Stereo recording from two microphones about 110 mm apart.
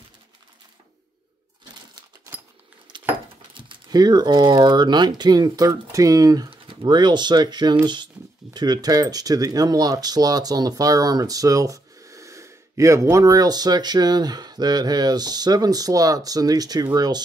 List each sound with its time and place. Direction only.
3.5 s speech: 45° right (ahead or behind)
6.5 s speech: 45° right (ahead or behind)